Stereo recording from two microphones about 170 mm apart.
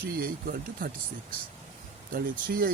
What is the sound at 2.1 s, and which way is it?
Speech, 55° right (ahead or behind).